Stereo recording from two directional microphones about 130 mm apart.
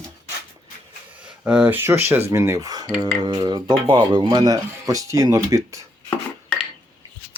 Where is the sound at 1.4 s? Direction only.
10° right (ahead or behind); by 2.9 s 30° right (ahead or behind).